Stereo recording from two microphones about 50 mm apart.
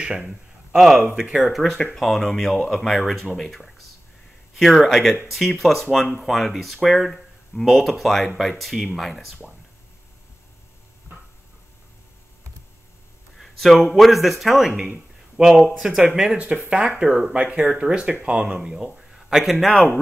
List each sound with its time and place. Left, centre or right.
0.0 s a man's voice: centre
2.0 s speech: centre
13.4 s a sound: centre
13.9 s a man's voice: centre
15.7 s speech: centre
16.3 s speech: right
17.0 s a man's voice: centre
17.3 s a man's voice: right; by 19.9 s centre